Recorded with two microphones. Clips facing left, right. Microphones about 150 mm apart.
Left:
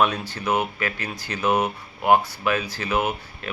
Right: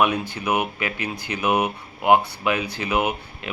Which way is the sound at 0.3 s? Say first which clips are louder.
Even; 15° right (ahead or behind).